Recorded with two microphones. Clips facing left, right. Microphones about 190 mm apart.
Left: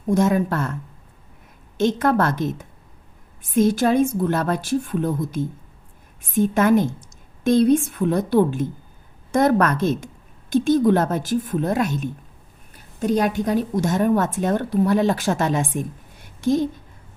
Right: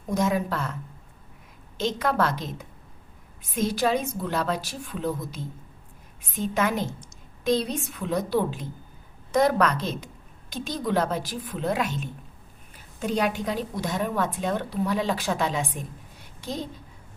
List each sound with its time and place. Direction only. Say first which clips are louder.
0.2 s a woman's voice: left 3 dB; 50° left (ahead or behind)
1.8 s a woman's voice: left 6 dB; 50° left (ahead or behind)